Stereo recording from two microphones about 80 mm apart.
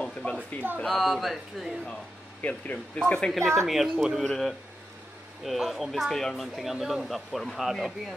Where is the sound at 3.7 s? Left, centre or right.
Centre.